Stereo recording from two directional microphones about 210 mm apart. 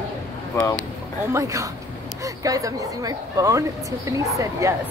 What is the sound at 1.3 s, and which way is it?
Speech, 15° right (ahead or behind).